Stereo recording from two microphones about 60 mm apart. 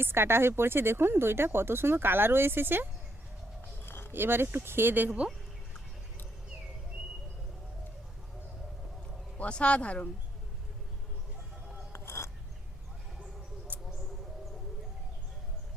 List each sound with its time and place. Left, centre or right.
0.0 s speech: right
3.8 s a sound: left
4.1 s speech: right
9.4 s speech: centre
11.9 s a sound: left
13.7 s mouse: left